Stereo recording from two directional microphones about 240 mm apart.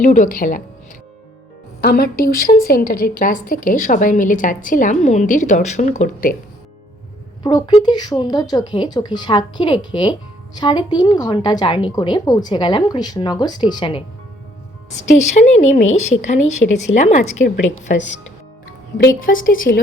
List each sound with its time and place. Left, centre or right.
0.0 s a woman's voice: left
1.8 s a woman's voice: left
7.4 s a woman's voice: centre
15.2 s a woman's voice: left
19.0 s a woman's voice: left